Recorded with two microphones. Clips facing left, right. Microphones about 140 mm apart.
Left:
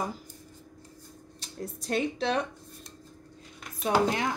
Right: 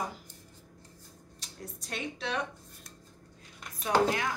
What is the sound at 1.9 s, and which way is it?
Speech, 35° left (ahead or behind).